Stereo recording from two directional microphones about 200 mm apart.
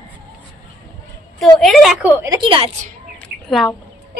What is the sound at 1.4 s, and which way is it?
Speech, centre (ahead or behind).